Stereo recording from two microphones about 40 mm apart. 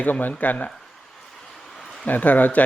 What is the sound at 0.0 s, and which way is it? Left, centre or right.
Speech, left.